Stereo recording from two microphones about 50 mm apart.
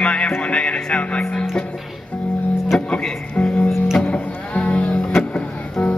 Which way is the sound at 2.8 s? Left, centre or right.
Left.